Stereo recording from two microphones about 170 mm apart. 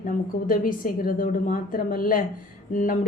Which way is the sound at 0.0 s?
55° left (ahead or behind).